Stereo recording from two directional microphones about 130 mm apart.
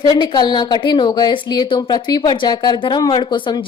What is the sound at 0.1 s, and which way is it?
A woman's voice, 30° left (ahead or behind).